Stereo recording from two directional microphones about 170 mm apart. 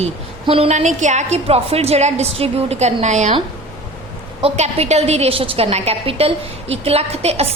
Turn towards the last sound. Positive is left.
turn(degrees=-35)  # may be behind; listen again after turning